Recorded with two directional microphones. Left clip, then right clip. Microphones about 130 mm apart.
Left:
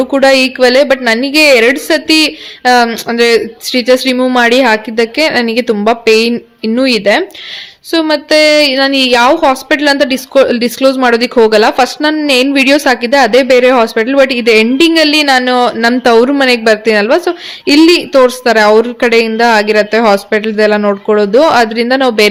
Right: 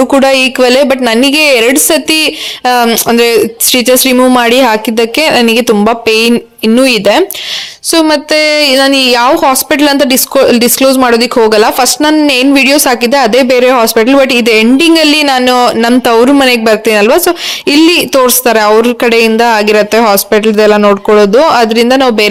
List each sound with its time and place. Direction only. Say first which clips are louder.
0.1 s a woman's voice: right 1 dB; 45° right (ahead or behind)